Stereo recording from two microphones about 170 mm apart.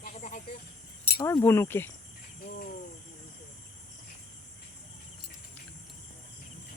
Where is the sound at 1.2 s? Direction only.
15° left (ahead or behind).